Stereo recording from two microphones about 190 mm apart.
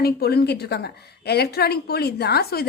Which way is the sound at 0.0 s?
55° left (ahead or behind).